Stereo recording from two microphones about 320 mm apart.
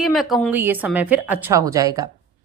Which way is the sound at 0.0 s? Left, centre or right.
Centre.